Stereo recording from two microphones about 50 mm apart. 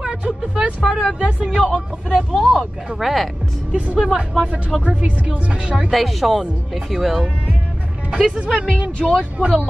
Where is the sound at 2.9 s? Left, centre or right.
Centre.